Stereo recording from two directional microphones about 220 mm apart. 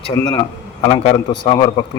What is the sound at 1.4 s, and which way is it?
Speech, 20° left (ahead or behind).